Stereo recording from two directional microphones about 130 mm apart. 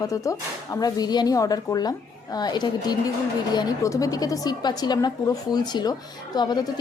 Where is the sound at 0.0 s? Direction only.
25° left (ahead or behind).